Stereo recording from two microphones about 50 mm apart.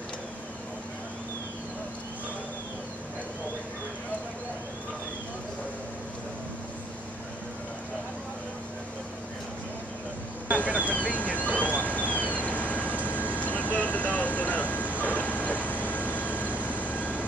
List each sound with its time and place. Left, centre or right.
10.7 s vehicle: right
11.1 s vehicle: left
12.7 s vehicle: right
13.0 s vehicle: left